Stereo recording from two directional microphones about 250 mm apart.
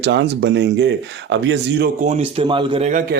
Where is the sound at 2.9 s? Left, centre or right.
Right.